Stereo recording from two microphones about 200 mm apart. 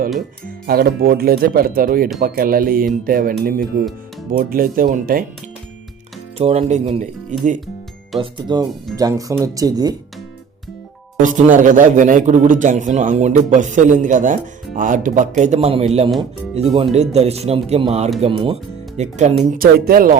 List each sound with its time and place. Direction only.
0.7 s speech: 50° right (ahead or behind)
6.3 s a man's voice: 30° right (ahead or behind)
8.2 s speech: 20° right (ahead or behind)
11.2 s a man's voice: 40° right (ahead or behind)
19.5 s speech: 45° right (ahead or behind)